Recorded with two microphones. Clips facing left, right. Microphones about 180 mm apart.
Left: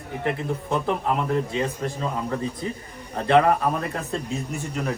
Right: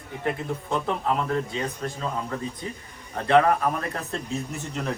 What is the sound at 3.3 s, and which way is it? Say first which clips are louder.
Speech: left 1 dB; 5° left (ahead or behind).